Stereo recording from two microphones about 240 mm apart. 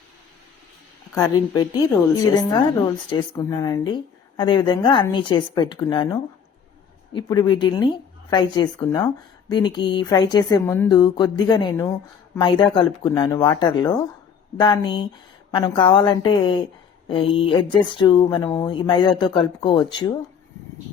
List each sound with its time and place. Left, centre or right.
1.1 s a woman's voice: centre